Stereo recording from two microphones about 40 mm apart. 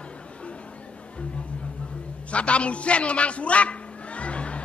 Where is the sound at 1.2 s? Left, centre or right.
Left.